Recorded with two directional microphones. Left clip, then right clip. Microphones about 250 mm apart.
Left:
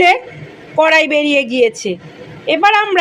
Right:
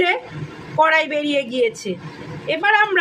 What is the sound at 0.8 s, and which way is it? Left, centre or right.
Speech, centre.